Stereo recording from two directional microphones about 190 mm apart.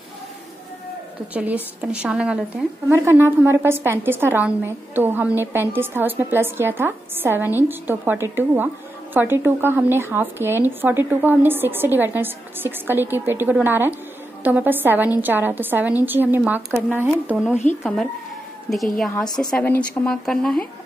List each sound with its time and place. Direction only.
1.3 s a woman's voice: 5° right (ahead or behind)
18.9 s a woman's voice: centre (ahead or behind)